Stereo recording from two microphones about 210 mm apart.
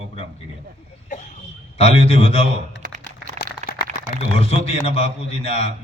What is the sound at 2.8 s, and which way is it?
Typing, 35° right (ahead or behind).